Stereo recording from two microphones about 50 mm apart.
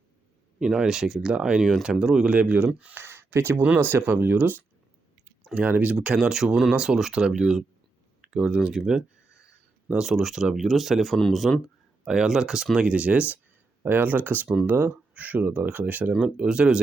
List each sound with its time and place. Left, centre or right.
0.6 s speech: centre
2.9 s a sound: right
3.8 s speech: right; by 8.8 s centre
9.9 s speech: centre
12.0 s speech: centre; by 13.4 s right
13.8 s speech: right
14.4 s speech: centre
14.7 s speech: right
16.2 s speech: right